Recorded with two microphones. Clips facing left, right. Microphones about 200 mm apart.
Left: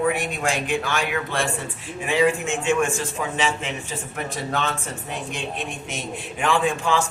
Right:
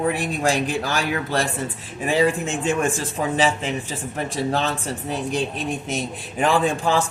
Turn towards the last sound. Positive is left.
turn(degrees=-35)  # may be behind; listen again after turning